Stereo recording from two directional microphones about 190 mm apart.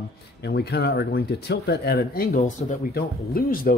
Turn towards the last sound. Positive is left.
turn(degrees=50)  # may be behind; listen again after turning